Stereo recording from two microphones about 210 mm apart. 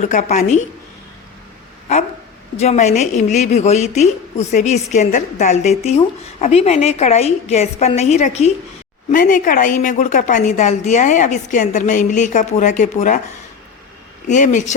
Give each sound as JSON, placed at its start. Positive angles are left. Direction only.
{"t": 0.0, "sound": "a woman's voice", "side_deg": 35}
{"t": 2.6, "sound": "a woman's voice", "side_deg": 35}
{"t": 14.3, "sound": "a woman's voice", "side_deg": 35}